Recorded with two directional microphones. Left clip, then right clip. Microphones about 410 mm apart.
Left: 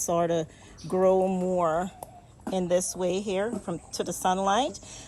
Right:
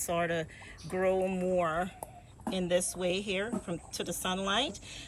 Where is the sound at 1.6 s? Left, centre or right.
Centre.